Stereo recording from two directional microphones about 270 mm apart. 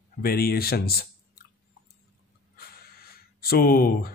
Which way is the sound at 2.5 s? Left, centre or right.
Left.